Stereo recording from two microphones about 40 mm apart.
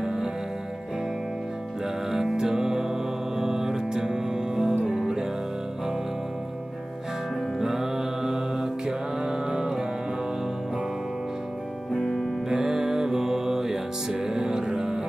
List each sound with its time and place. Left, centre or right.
0.0 s music: centre
2.0 s music: centre
7.5 s music: centre
11.9 s music: centre
12.6 s music: centre